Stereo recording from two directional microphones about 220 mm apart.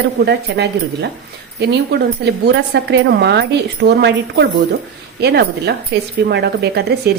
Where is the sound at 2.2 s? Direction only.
50° right (ahead or behind).